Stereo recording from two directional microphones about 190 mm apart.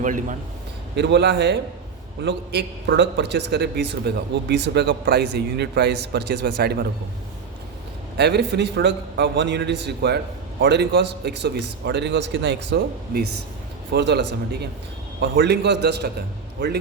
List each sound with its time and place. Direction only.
0.0 s a man's voice: 40° right (ahead or behind)
0.9 s a man's voice: 65° right (ahead or behind)
8.1 s a man's voice: 60° right (ahead or behind)